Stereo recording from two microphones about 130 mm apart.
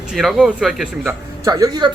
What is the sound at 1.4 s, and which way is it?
Speech, 25° right (ahead or behind).